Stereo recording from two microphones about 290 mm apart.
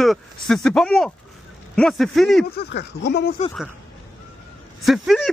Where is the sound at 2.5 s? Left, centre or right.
Left.